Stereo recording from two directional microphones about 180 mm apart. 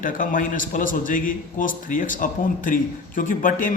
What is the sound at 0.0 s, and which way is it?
Speech, 50° left (ahead or behind).